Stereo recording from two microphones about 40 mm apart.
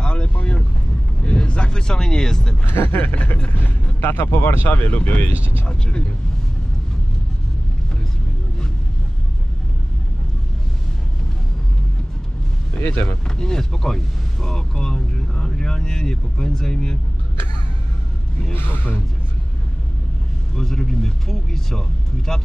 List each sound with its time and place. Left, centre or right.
0.0 s vehicle: left
2.6 s speech: left
4.1 s speech: left
4.4 s speech: left
4.9 s speech: left
5.7 s speech: left
12.8 s speech: left
13.4 s speech: centre
18.5 s speech: left
20.5 s speech: centre